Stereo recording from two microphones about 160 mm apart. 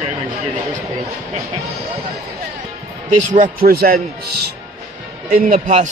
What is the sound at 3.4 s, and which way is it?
Speech, 70° right (ahead or behind).